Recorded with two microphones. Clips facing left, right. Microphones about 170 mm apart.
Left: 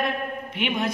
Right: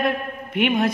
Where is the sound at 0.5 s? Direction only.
55° right (ahead or behind).